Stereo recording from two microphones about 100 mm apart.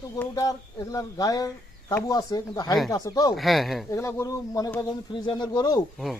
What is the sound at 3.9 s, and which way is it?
Speech, 30° left (ahead or behind).